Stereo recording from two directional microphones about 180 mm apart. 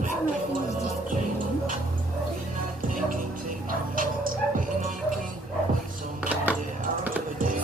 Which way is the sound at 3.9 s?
50° right (ahead or behind).